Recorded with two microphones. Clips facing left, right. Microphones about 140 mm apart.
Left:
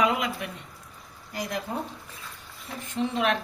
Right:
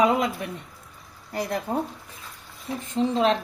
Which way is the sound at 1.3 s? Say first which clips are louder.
Right 5 dB; 30° right (ahead or behind).